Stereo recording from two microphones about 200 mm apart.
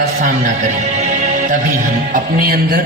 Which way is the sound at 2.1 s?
50° right (ahead or behind).